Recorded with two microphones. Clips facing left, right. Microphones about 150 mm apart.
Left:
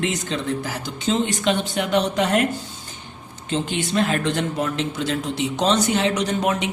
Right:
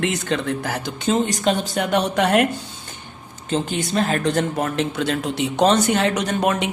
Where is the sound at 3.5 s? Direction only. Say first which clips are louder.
Right 1 dB; 40° right (ahead or behind).